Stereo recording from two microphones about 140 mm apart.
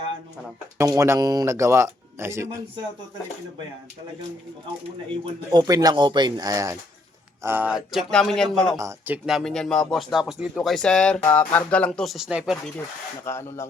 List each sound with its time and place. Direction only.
0.8 s speech: 20° right (ahead or behind)
5.5 s speech: 25° right (ahead or behind)
7.4 s speech: 15° right (ahead or behind); by 8.8 s 5° left (ahead or behind)
8.8 s speech: 15° right (ahead or behind)
13.2 s speech: 20° left (ahead or behind)